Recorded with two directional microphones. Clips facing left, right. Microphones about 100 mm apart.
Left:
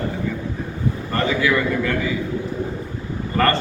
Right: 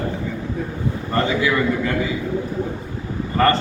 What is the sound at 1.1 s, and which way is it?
Speech, 20° right (ahead or behind).